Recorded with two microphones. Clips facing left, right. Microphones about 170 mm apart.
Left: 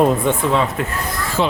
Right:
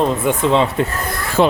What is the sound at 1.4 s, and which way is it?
Speech, 55° right (ahead or behind).